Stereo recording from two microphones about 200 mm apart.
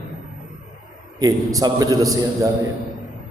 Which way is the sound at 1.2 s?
20° right (ahead or behind).